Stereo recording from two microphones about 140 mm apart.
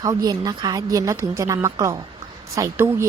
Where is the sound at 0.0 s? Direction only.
25° right (ahead or behind).